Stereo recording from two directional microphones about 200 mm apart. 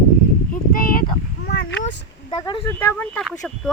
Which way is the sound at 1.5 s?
55° left (ahead or behind).